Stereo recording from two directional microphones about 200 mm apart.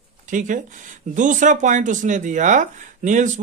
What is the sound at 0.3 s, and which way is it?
Speech, 40° right (ahead or behind).